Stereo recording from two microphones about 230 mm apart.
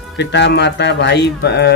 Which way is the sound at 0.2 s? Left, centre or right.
Left.